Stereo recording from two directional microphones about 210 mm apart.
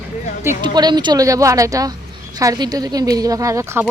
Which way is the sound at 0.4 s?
20° right (ahead or behind).